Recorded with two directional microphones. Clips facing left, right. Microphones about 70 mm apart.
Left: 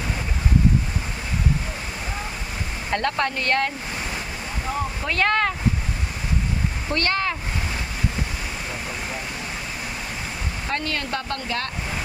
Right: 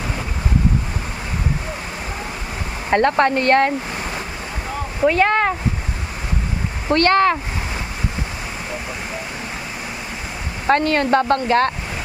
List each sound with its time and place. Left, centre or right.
2.9 s speech: right
5.0 s speech: centre
6.9 s speech: right
10.8 s speech: right